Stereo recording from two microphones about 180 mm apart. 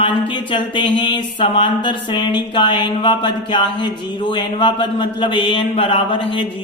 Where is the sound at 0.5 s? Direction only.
25° left (ahead or behind).